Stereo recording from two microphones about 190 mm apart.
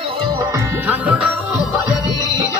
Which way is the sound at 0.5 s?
10° right (ahead or behind).